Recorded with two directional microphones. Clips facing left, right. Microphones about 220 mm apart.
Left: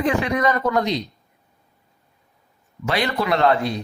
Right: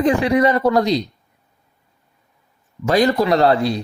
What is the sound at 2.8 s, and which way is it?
Speech, 40° right (ahead or behind).